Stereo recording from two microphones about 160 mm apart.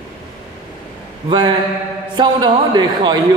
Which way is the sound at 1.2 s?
30° right (ahead or behind).